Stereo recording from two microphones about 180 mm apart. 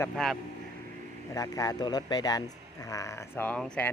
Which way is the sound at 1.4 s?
20° left (ahead or behind).